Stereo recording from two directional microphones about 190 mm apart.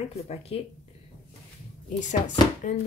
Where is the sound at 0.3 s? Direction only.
35° left (ahead or behind).